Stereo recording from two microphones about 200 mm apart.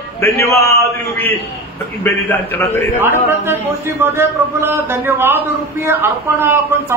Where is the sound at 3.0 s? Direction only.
10° right (ahead or behind).